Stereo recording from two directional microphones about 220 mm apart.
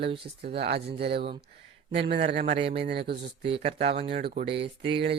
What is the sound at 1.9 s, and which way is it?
Speech, 50° right (ahead or behind).